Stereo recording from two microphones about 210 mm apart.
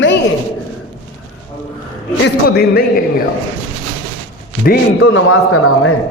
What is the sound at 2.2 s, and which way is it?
Speech, 50° left (ahead or behind).